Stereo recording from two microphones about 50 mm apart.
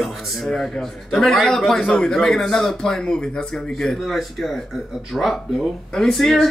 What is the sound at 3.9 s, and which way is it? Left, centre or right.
A man's voice, centre.